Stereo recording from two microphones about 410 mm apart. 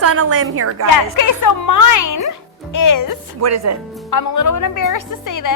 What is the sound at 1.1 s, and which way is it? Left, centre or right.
A woman's voice, left.